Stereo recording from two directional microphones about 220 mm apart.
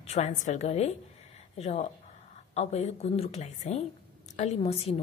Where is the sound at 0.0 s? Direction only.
30° left (ahead or behind).